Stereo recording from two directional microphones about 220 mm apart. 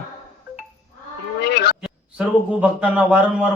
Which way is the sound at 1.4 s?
50° left (ahead or behind).